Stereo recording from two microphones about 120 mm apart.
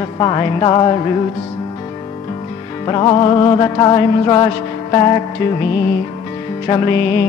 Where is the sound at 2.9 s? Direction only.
40° left (ahead or behind).